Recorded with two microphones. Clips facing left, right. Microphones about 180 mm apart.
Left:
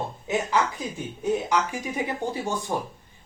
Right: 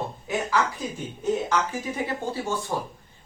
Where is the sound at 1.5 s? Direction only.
15° left (ahead or behind).